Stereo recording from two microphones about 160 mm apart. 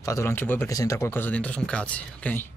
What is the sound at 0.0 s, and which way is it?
Speech, 20° left (ahead or behind).